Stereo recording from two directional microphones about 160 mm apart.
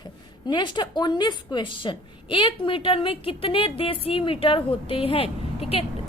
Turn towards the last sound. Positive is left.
turn(degrees=35)  # may be behind; listen again after turning